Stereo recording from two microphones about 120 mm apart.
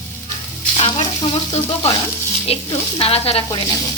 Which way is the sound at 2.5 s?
55° left (ahead or behind).